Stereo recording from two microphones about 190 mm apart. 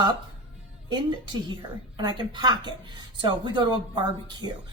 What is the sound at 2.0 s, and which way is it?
Speech, 25° right (ahead or behind).